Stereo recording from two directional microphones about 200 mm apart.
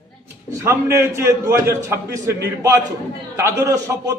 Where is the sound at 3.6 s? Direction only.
15° right (ahead or behind).